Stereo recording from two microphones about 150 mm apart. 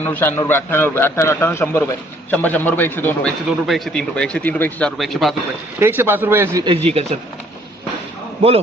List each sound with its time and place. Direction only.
0.0 s a man's voice: 15° left (ahead or behind)
3.7 s speech: centre (ahead or behind)
5.8 s speech: 15° right (ahead or behind)
6.7 s speech: 45° right (ahead or behind)
8.4 s a man's voice: 40° right (ahead or behind)